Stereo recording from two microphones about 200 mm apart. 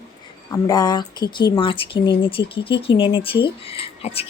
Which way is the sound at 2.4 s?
60° left (ahead or behind).